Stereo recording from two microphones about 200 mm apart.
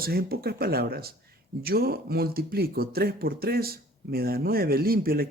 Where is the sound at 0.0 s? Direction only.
50° right (ahead or behind).